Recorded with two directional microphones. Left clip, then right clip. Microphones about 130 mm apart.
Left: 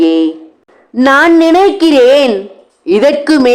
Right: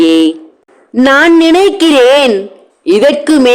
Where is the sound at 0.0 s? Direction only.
25° right (ahead or behind).